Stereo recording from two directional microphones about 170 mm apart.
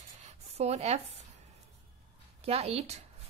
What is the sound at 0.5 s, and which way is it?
Speech, 40° right (ahead or behind).